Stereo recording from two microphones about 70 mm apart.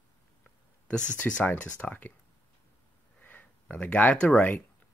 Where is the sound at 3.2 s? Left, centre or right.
Left.